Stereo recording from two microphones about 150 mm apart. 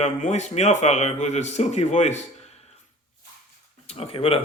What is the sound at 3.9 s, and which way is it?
Speech, 40° left (ahead or behind).